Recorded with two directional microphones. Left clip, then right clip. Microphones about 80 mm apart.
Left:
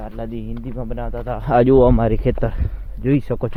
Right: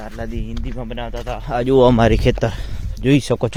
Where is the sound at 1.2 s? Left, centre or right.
Left.